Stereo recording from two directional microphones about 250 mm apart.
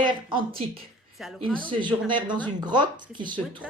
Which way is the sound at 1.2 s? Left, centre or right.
Centre.